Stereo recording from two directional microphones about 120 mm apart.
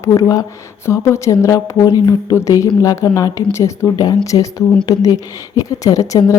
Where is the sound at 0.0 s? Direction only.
25° left (ahead or behind).